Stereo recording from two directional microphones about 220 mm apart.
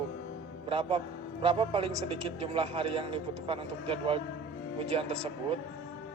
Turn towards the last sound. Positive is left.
turn(degrees=-30)  # may be behind; listen again after turning